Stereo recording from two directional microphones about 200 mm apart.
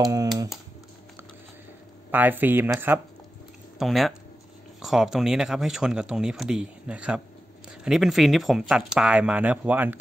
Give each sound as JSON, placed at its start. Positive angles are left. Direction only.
{"t": 0.0, "sound": "speech", "side_deg": -20}
{"t": 2.0, "sound": "speech", "side_deg": -10}